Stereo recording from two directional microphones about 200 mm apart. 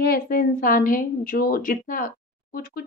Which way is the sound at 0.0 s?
45° left (ahead or behind).